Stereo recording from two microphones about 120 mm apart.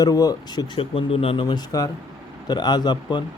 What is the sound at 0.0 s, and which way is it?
Speech, 30° left (ahead or behind).